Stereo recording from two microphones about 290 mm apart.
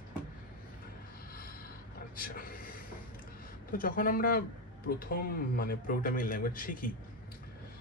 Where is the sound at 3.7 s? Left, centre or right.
Left.